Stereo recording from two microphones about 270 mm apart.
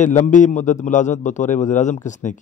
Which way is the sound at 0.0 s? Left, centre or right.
Left.